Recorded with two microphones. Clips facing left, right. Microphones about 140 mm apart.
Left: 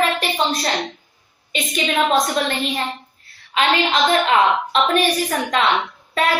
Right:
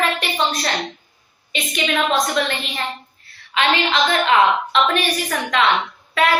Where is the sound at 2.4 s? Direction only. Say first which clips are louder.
Even; 40° left (ahead or behind).